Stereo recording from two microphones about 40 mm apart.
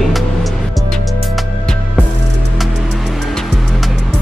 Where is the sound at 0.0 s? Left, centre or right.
Centre.